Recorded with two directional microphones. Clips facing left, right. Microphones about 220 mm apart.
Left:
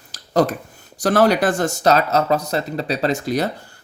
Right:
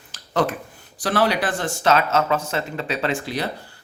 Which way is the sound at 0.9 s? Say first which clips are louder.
Left 5 dB; 45° left (ahead or behind).